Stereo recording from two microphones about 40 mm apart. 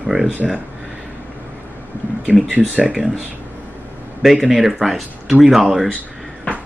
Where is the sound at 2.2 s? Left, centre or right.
Right.